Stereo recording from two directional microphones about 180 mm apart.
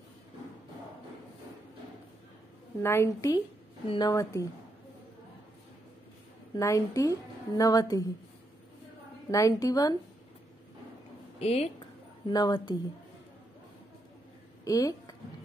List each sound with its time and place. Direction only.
2.8 s a woman's voice: 15° left (ahead or behind)
3.8 s a woman's voice: 30° left (ahead or behind)
4.1 s a woman's voice: 15° left (ahead or behind)
6.5 s a woman's voice: 15° left (ahead or behind)
9.3 s a woman's voice: 20° left (ahead or behind)
11.3 s speech: 35° left (ahead or behind)
12.3 s a woman's voice: 20° left (ahead or behind)
14.6 s a sound: 20° left (ahead or behind)